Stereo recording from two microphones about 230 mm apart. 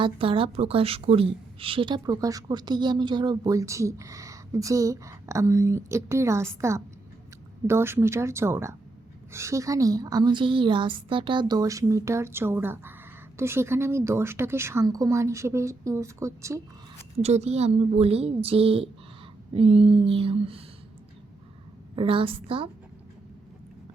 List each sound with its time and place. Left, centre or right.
0.0 s a woman's voice: right
17.2 s a woman's voice: right
21.9 s a woman's voice: right